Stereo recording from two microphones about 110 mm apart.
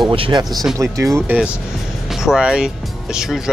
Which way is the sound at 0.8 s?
30° right (ahead or behind).